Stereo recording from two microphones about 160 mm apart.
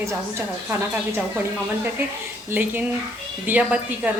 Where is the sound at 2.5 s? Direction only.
10° right (ahead or behind).